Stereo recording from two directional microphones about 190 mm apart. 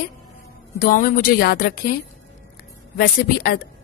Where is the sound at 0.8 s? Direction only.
50° left (ahead or behind).